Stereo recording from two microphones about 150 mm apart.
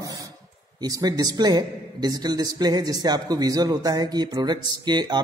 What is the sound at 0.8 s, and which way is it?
A man's voice, 25° right (ahead or behind).